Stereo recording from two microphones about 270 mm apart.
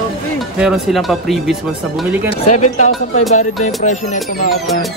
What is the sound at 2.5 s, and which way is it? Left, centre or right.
Music, left.